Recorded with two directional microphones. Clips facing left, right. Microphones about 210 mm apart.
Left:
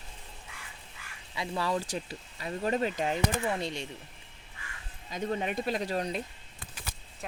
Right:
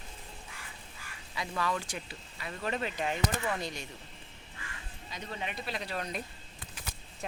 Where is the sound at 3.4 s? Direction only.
25° left (ahead or behind).